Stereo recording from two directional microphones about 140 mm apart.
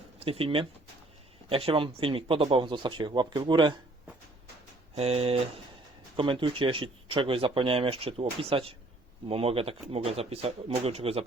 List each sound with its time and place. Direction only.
0.2 s speech: 40° right (ahead or behind)
4.9 s speech: 45° right (ahead or behind)